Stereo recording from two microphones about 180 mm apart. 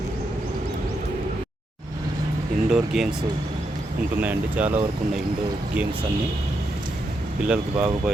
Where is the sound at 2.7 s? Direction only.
Centre (ahead or behind).